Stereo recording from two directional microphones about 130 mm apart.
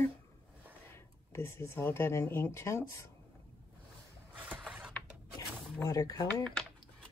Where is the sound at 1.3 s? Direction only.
20° left (ahead or behind).